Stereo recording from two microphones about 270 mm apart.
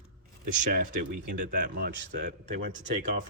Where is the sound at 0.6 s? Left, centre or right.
Right.